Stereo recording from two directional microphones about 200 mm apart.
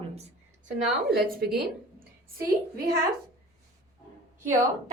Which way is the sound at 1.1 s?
50° right (ahead or behind).